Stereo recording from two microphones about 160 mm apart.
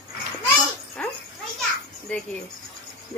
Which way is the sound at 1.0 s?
10° left (ahead or behind).